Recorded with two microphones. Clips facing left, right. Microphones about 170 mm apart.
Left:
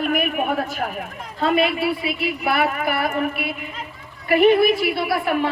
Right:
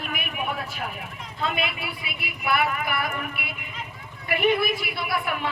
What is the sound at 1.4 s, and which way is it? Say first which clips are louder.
A woman's voice: left 10 dB; 35° left (ahead or behind).